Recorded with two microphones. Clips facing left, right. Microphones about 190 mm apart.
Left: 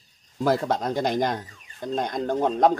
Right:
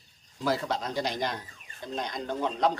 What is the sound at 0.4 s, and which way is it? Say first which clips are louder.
Speech: left 6 dB; 50° left (ahead or behind).